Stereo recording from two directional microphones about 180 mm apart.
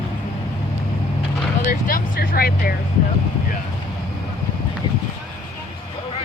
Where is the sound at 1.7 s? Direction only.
50° left (ahead or behind).